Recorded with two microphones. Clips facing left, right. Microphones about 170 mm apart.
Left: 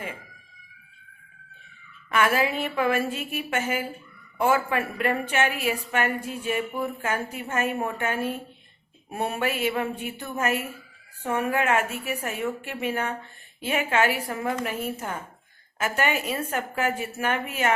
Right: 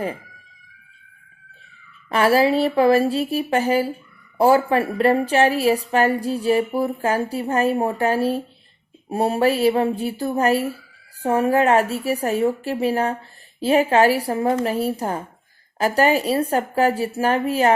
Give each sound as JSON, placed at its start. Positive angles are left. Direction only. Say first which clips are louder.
{"t": 2.0, "sound": "a woman's voice", "louder": "right 7 dB", "side_deg": -35}